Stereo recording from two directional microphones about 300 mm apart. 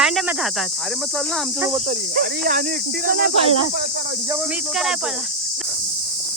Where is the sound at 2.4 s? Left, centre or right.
Right.